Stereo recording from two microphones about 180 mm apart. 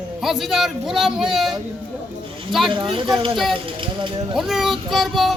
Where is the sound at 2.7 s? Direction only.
30° right (ahead or behind).